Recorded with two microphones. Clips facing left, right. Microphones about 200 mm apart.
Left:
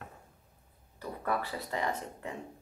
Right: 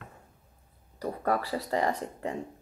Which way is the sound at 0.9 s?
40° right (ahead or behind).